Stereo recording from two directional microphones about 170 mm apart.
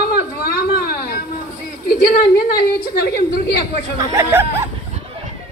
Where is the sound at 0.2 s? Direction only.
60° left (ahead or behind).